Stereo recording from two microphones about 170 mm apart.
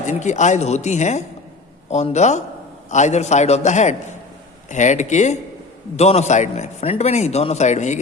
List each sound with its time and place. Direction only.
0.0 s a man's voice: 45° left (ahead or behind)